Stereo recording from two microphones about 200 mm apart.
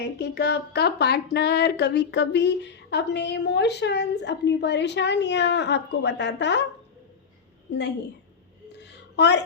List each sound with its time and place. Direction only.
0.0 s speech: 55° left (ahead or behind)
7.7 s speech: 60° left (ahead or behind)
8.8 s a sound: 60° left (ahead or behind)